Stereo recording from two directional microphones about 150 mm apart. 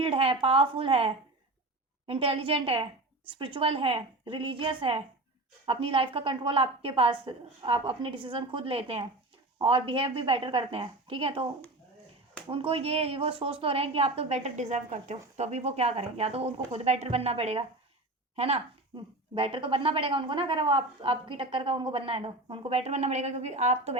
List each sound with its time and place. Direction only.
0.0 s speech: 40° right (ahead or behind)
12.5 s speech: 40° right (ahead or behind)